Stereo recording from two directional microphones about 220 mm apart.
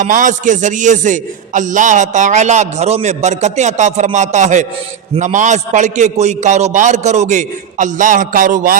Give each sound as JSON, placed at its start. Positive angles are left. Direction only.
{"t": 0.0, "sound": "a man's voice", "side_deg": -35}